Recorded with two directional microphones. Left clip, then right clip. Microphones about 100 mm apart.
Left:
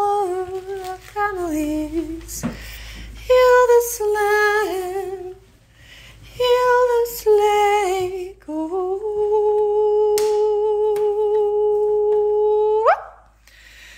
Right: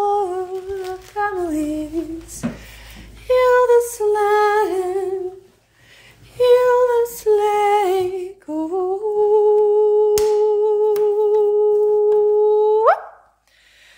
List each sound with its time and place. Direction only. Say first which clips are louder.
0.0 s humming: right 1 dB; 10° right (ahead or behind)
2.6 s female singing: left 3 dB; centre (ahead or behind)
6.3 s female singing: right 2 dB; 15° right (ahead or behind)
7.7 s music: right 2 dB; 25° right (ahead or behind)
8.5 s humming: right 2 dB; 40° right (ahead or behind)
10.6 s humming: right 2 dB; 50° right (ahead or behind)
12.4 s a sound: right 2 dB; 50° right (ahead or behind)